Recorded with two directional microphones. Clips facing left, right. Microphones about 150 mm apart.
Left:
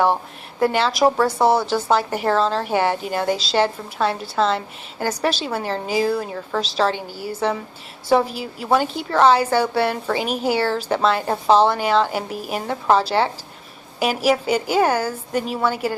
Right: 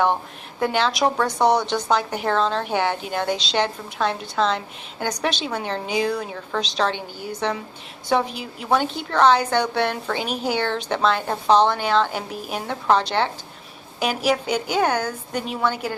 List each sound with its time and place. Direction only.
0.6 s a woman's voice: 5° left (ahead or behind)